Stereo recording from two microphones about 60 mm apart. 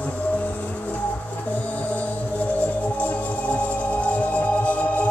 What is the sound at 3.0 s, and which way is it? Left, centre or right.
Music, left.